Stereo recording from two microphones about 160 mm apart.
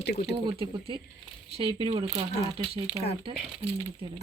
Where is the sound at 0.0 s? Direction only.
90° left.